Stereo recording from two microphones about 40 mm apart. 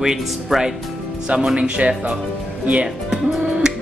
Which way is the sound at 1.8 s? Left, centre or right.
Right.